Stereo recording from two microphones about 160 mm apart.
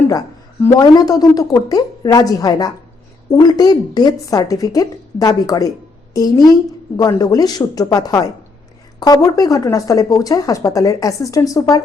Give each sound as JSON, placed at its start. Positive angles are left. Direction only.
{"t": 0.6, "sound": "speech", "side_deg": 20}